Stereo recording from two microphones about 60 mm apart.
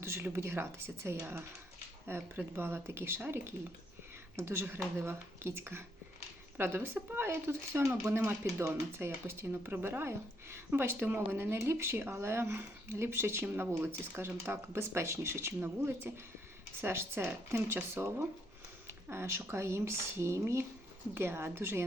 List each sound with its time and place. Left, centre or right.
0.0 s a sound: right
0.3 s a woman's voice: right
8.1 s a woman's voice: right